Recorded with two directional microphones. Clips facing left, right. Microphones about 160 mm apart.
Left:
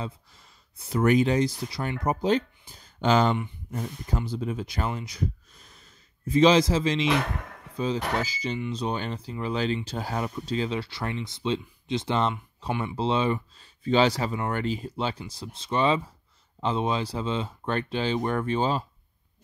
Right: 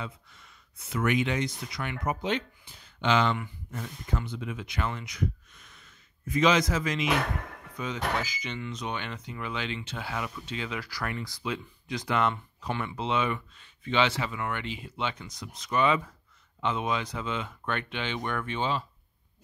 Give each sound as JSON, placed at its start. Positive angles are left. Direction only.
{"t": 0.0, "sound": "speech", "side_deg": 35}
{"t": 12.6, "sound": "speech", "side_deg": 15}
{"t": 12.9, "sound": "speech", "side_deg": 30}